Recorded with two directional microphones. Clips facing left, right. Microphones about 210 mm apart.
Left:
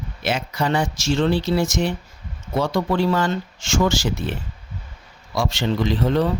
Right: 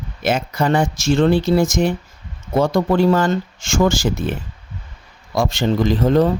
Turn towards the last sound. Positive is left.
turn(degrees=-45)  # may be behind; listen again after turning